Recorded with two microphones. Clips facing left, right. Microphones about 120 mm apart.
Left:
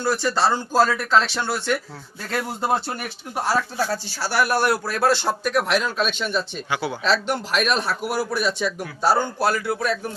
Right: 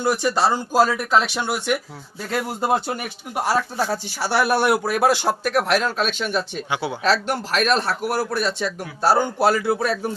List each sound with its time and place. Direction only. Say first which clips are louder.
0.0 s speech: right 1 dB; 15° right (ahead or behind)
7.3 s speech: right 2 dB; centre (ahead or behind)
9.4 s speech: right 3 dB; 25° right (ahead or behind)